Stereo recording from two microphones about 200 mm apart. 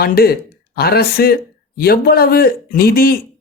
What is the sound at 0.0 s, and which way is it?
Speech, 50° left (ahead or behind).